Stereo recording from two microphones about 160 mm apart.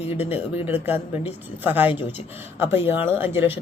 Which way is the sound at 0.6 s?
10° right (ahead or behind).